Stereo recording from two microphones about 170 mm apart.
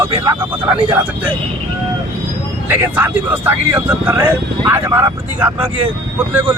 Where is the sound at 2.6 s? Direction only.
10° right (ahead or behind).